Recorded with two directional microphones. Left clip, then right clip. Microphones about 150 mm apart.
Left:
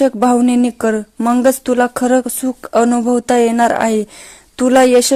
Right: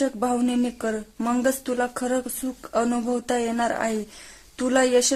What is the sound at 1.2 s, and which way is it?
Speech, 30° left (ahead or behind).